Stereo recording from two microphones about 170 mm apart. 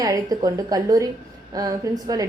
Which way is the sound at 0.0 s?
20° right (ahead or behind).